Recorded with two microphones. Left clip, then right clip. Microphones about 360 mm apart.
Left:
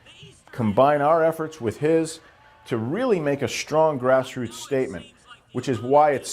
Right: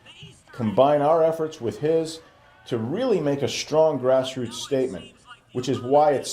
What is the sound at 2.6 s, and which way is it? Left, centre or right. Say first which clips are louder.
Speech: left 1 dB; left.